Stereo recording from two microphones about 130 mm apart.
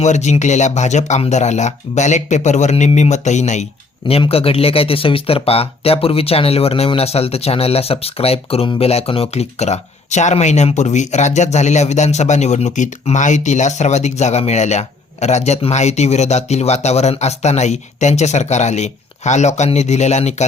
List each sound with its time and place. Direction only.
0.0 s speech: 60° left (ahead or behind)
4.1 s speech: 50° left (ahead or behind)